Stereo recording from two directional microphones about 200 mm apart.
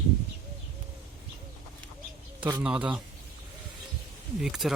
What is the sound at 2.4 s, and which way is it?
Speech, 20° right (ahead or behind).